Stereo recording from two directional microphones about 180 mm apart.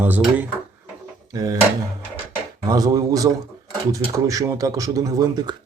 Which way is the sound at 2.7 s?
20° right (ahead or behind).